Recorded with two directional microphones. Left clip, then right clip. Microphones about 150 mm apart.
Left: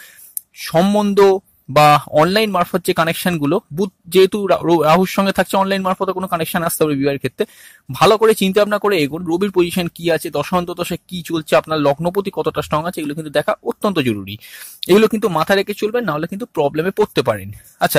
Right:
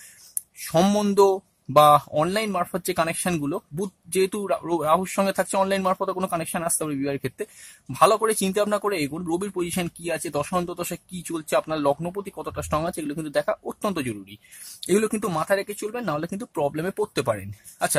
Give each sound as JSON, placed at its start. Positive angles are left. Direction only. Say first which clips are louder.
{"t": 0.7, "sound": "speech", "louder": "left 6 dB", "side_deg": 15}
{"t": 1.1, "sound": "speech", "louder": "left 7 dB", "side_deg": 25}
{"t": 1.8, "sound": "speech", "louder": "left 5 dB", "side_deg": 40}
{"t": 4.5, "sound": "speech", "louder": "left 9 dB", "side_deg": 45}
{"t": 5.6, "sound": "speech", "louder": "left 5 dB", "side_deg": 30}
{"t": 6.3, "sound": "speech", "louder": "left 8 dB", "side_deg": 45}
{"t": 9.2, "sound": "speech", "louder": "left 8 dB", "side_deg": 30}
{"t": 9.5, "sound": "speech", "louder": "left 11 dB", "side_deg": 40}
{"t": 12.0, "sound": "speech", "louder": "left 13 dB", "side_deg": 40}